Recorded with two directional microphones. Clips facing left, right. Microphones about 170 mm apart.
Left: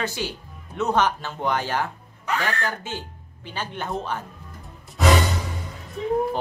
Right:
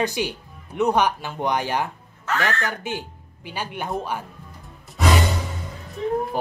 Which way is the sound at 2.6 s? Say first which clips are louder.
Right 2 dB; 15° right (ahead or behind).